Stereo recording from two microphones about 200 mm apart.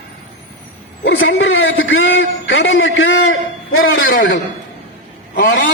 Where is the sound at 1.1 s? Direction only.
70° left (ahead or behind).